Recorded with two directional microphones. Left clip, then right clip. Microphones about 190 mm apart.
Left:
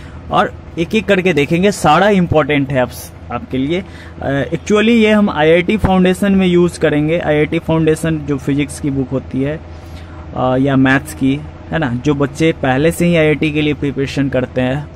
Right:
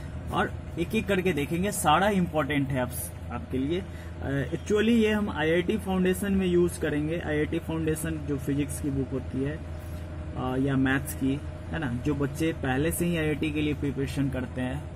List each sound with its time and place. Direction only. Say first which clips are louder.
0.3 s speech: left 15 dB; 45° left (ahead or behind)
10.3 s speech: left 15 dB; 50° left (ahead or behind)